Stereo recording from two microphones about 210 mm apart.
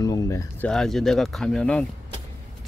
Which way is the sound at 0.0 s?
15° left (ahead or behind).